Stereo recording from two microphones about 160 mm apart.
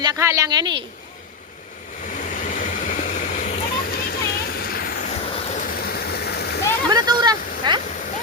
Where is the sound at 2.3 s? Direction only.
55° left (ahead or behind).